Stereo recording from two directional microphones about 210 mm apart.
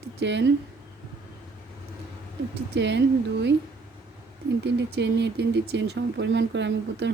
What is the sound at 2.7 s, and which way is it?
Speech, 55° right (ahead or behind).